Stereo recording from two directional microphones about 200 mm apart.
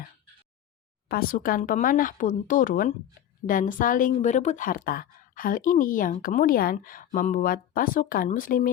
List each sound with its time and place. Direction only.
1.0 s a woman's voice: 50° left (ahead or behind)